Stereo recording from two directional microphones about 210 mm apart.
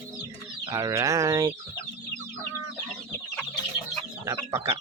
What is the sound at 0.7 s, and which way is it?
Bird, 15° right (ahead or behind).